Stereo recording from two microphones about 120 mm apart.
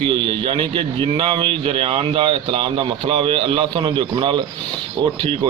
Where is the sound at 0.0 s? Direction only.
45° right (ahead or behind).